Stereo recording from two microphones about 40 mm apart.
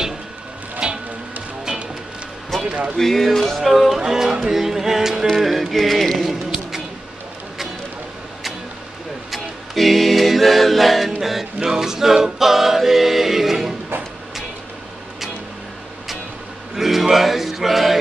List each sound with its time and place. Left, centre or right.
0.8 s music: centre
2.6 s speech: right
3.0 s music: centre
9.3 s a capella: centre
11.6 s a capella: centre
16.7 s a sound: centre